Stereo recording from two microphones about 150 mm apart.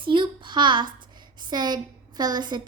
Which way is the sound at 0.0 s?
35° right (ahead or behind).